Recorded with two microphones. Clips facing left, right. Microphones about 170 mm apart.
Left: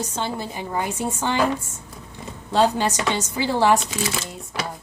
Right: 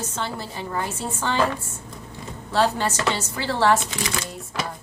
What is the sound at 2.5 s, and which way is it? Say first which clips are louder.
A woman's voice: left 2 dB; 15° left (ahead or behind).